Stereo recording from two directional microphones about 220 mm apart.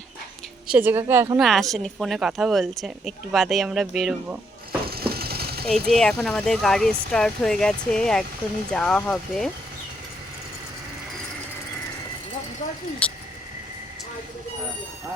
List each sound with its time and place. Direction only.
0.7 s a woman's voice: 10° right (ahead or behind)
1.4 s speech: centre (ahead or behind)
4.9 s sewing machine: 45° right (ahead or behind)
5.6 s speech: 5° left (ahead or behind)
13.0 s speech: 5° left (ahead or behind)